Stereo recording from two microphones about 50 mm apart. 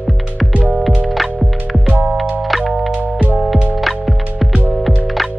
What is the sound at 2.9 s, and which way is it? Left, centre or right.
Music, right.